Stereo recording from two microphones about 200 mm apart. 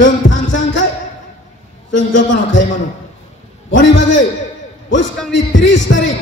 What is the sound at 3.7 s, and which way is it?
Speech, 65° left (ahead or behind).